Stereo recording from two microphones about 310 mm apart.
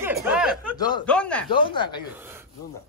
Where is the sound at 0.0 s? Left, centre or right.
Centre.